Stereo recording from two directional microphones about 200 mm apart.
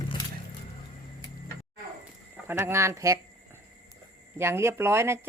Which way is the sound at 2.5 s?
10° right (ahead or behind).